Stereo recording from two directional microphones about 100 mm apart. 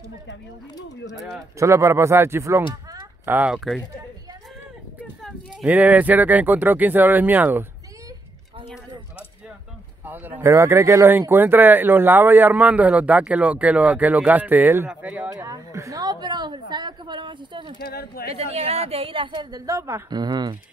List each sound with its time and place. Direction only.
1.6 s speech: 30° right (ahead or behind)
3.5 s speech: centre (ahead or behind)
5.7 s speech: 15° right (ahead or behind)
10.0 s speech: 15° right (ahead or behind)
10.5 s speech: 30° right (ahead or behind)
15.4 s a woman's voice: 35° right (ahead or behind); by 17.7 s 50° right (ahead or behind)
18.3 s a woman's voice: 90° right; by 19.6 s 50° right (ahead or behind)
19.6 s speech: 30° right (ahead or behind)
20.1 s speech: 45° right (ahead or behind)